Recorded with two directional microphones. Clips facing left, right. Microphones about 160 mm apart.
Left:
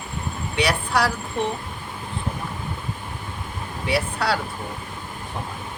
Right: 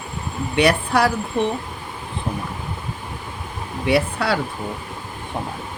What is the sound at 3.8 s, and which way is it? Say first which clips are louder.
Speech: right 4 dB; 55° right (ahead or behind).